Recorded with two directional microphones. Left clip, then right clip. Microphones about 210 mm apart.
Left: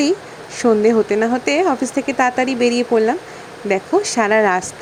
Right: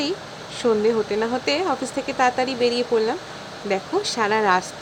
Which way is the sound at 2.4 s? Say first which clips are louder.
Left 4 dB; 15° right (ahead or behind).